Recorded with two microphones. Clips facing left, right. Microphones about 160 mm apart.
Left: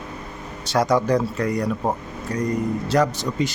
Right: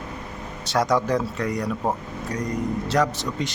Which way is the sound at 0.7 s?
Centre (ahead or behind).